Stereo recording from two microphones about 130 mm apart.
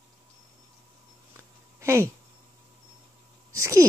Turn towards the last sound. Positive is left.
turn(degrees=-20)  # may be behind; listen again after turning